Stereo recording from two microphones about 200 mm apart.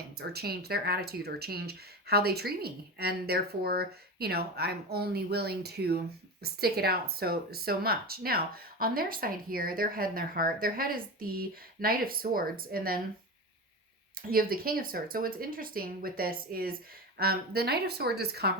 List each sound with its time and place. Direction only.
0.2 s speech: 50° right (ahead or behind)
14.2 s speech: 45° right (ahead or behind)